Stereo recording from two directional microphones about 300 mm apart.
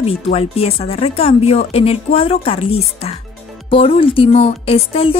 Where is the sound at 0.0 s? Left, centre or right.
Centre.